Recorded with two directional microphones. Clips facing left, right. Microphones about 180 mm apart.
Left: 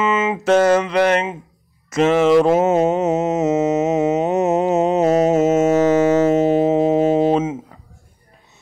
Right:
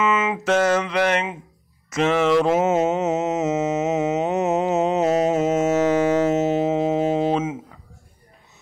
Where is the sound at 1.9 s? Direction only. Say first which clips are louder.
Left 5 dB; 40° left (ahead or behind).